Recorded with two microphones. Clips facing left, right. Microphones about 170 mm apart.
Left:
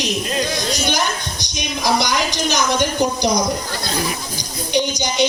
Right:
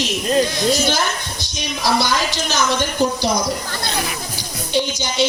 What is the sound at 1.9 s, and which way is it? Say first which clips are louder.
Speech: even; 15° left (ahead or behind).